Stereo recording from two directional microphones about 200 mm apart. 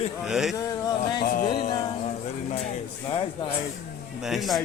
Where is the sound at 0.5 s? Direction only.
15° left (ahead or behind).